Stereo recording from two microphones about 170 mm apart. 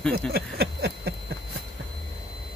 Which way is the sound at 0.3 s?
70° right (ahead or behind).